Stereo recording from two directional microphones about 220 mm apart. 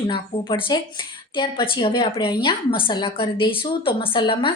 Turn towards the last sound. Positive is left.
turn(degrees=25)  # may be behind; listen again after turning